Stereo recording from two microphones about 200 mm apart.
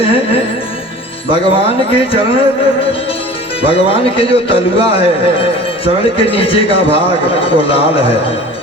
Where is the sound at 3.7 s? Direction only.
25° left (ahead or behind).